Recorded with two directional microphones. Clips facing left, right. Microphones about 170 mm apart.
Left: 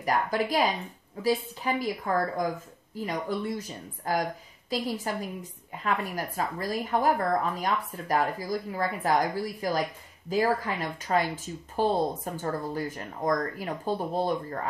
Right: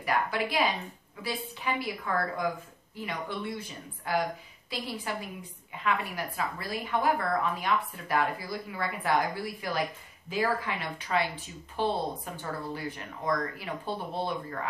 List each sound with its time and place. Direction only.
0.0 s a woman's voice: 40° left (ahead or behind)